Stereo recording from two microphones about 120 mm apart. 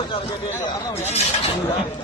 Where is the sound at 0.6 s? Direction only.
65° left (ahead or behind).